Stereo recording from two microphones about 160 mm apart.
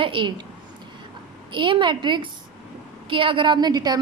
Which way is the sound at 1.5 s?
30° right (ahead or behind).